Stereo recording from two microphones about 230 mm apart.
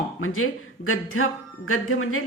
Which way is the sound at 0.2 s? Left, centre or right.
Left.